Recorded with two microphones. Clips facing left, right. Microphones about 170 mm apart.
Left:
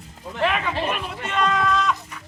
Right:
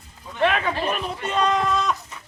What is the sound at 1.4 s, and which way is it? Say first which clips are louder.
Speech: left 1 dB; 20° right (ahead or behind).